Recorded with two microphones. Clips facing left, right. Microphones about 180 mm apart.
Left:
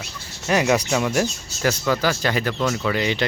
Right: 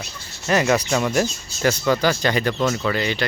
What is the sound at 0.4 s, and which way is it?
Speech, 10° left (ahead or behind).